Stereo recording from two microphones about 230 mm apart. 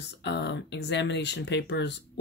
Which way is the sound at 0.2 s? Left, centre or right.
Left.